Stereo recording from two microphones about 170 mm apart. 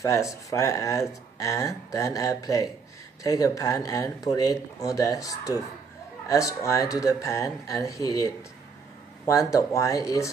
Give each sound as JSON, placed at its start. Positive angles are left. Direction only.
{"t": 0.0, "sound": "speech", "side_deg": 20}